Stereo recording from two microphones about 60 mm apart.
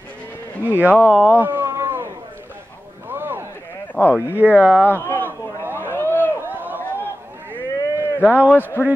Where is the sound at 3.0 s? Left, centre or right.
Right.